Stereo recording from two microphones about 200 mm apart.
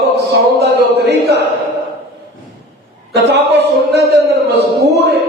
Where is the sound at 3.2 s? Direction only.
55° right (ahead or behind).